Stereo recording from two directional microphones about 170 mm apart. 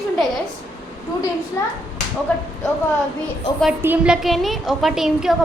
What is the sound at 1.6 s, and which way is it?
Speech, 20° left (ahead or behind).